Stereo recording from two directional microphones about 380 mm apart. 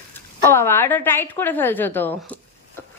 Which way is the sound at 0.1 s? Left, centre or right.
Centre.